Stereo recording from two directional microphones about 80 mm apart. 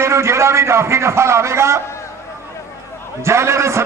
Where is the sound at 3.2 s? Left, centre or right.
Right.